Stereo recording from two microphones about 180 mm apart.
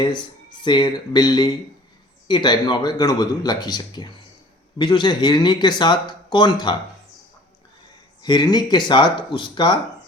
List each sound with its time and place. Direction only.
0.6 s speech: 25° left (ahead or behind)
8.2 s speech: 25° left (ahead or behind)